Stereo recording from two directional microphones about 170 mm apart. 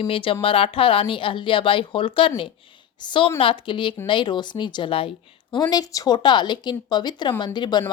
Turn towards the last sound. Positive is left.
turn(degrees=25)  # may be behind; listen again after turning